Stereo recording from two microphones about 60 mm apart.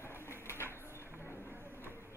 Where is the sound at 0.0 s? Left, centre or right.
Left.